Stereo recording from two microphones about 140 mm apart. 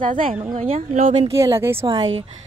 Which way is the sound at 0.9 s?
70° right (ahead or behind).